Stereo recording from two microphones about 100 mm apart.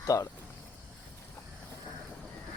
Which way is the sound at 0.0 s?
35° left (ahead or behind).